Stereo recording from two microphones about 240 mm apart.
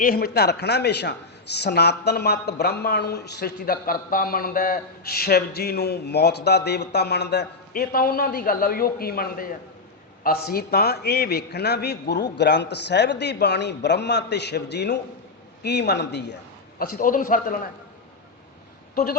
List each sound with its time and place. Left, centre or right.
0.0 s a man's voice: left